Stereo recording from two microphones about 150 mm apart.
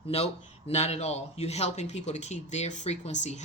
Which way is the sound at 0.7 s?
45° left (ahead or behind).